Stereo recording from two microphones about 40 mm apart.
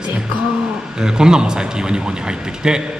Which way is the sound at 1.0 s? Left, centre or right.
Centre.